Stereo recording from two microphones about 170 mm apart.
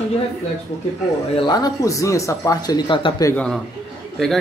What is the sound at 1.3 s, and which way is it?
Speech, 25° left (ahead or behind).